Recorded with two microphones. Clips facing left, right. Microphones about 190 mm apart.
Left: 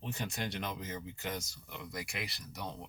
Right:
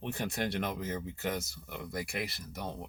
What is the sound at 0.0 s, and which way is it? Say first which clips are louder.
Speech: right 5 dB; 55° right (ahead or behind).